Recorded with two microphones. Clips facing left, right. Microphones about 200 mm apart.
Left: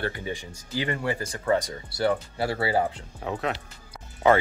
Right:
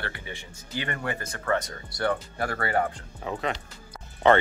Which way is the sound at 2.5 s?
5° left (ahead or behind).